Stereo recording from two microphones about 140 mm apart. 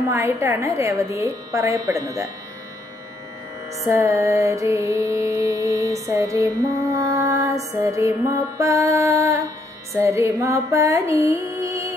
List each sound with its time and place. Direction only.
0.1 s music: 20° right (ahead or behind)
3.7 s music: 20° right (ahead or behind)